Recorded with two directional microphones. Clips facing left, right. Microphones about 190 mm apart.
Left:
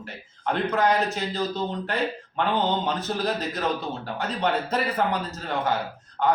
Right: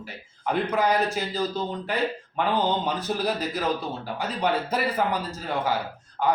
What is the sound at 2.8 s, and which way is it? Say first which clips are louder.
Speech: even; 10° right (ahead or behind).